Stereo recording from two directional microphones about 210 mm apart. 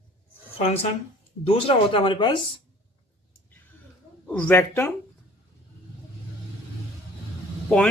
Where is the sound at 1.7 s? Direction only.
25° left (ahead or behind).